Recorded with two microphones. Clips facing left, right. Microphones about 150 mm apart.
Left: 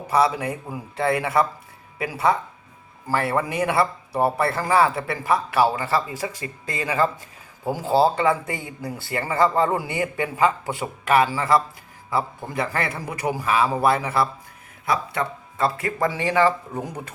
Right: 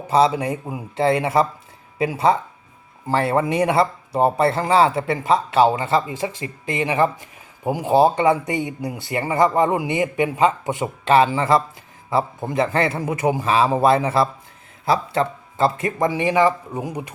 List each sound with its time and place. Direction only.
0.1 s speech: 25° right (ahead or behind)